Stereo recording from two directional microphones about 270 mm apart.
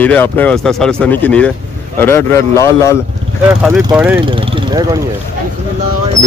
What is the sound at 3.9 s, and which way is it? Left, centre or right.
Speech, centre.